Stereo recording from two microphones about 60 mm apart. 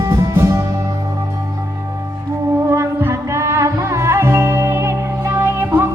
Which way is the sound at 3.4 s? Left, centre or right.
Right.